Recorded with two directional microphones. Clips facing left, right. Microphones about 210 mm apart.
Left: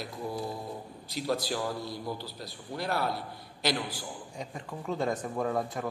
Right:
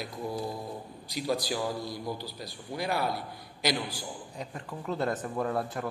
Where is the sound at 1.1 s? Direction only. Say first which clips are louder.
Right 1 dB; centre (ahead or behind).